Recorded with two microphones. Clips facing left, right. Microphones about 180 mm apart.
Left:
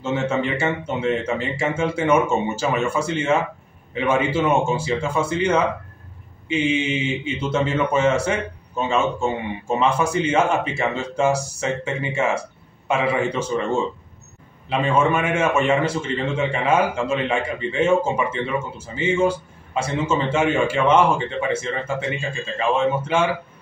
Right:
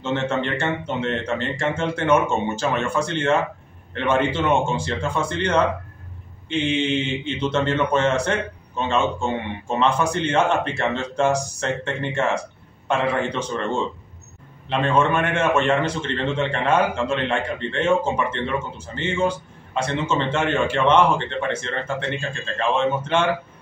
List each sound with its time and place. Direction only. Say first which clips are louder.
0.0 s a man's voice: left 1 dB; 5° left (ahead or behind)